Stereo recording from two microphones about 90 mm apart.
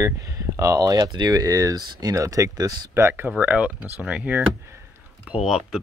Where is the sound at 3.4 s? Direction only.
15° right (ahead or behind).